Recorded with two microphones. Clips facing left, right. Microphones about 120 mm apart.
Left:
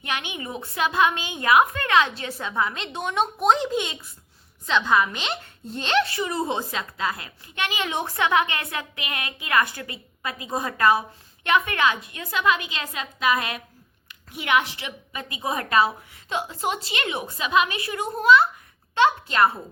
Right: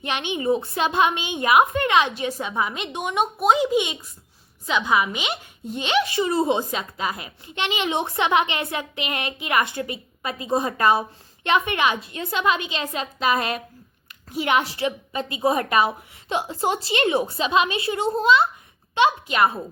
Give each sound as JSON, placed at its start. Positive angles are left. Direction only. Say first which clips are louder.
{"t": 0.0, "sound": "a woman's voice", "louder": "right 6 dB", "side_deg": -25}
{"t": 6.1, "sound": "a woman's voice", "louder": "right 5 dB", "side_deg": -25}